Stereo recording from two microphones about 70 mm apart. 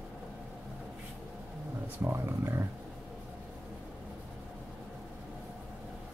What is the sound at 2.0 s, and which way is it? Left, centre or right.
Speech, right.